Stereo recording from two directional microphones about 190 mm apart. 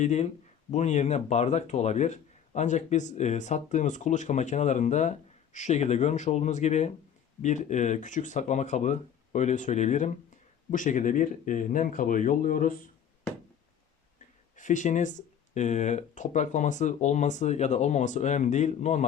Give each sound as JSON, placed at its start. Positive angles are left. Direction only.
{"t": 0.0, "sound": "speech", "side_deg": 35}
{"t": 14.5, "sound": "speech", "side_deg": 40}